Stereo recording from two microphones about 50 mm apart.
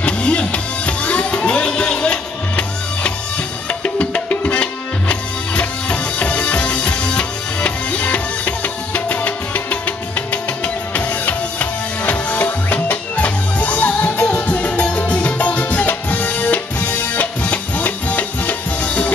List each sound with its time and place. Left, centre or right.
0.0 s music: left